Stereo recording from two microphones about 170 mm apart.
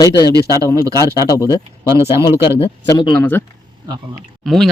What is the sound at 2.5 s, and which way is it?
Speech, 35° left (ahead or behind).